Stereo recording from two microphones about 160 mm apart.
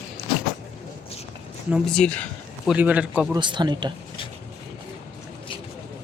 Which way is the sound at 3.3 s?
30° right (ahead or behind).